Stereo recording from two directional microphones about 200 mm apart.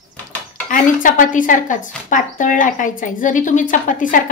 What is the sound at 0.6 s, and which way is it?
A woman's voice, 40° left (ahead or behind).